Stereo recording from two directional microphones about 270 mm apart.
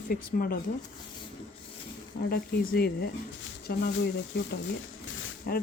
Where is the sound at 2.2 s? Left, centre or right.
Left.